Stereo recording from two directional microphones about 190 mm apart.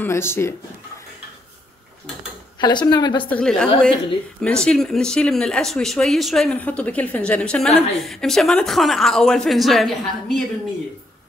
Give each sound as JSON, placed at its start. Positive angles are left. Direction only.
{"t": 0.0, "sound": "speech", "side_deg": 10}
{"t": 2.6, "sound": "a woman's voice", "side_deg": 20}
{"t": 3.3, "sound": "speech", "side_deg": 5}